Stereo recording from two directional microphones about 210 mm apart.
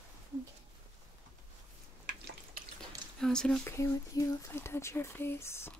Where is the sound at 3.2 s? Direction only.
5° left (ahead or behind).